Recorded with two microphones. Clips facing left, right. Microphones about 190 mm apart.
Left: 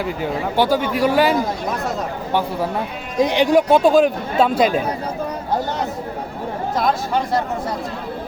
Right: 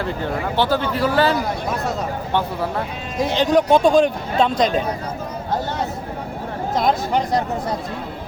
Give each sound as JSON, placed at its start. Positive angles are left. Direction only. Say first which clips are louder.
{"t": 0.0, "sound": "speech", "louder": "left 1 dB", "side_deg": 10}
{"t": 3.2, "sound": "speech", "louder": "left 2 dB", "side_deg": 15}
{"t": 6.7, "sound": "speech", "louder": "right 1 dB", "side_deg": -20}